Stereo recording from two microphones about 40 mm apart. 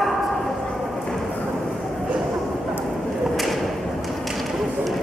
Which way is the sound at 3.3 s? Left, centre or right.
Centre.